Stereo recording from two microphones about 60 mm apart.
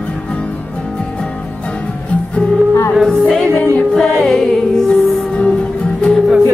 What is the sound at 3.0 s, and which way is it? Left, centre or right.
Music, centre.